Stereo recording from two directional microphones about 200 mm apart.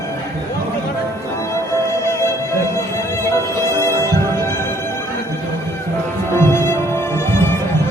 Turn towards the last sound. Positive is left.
turn(degrees=15)  # may be behind; listen again after turning